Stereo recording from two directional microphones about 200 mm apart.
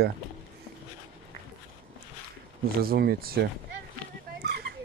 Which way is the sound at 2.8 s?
50° right (ahead or behind).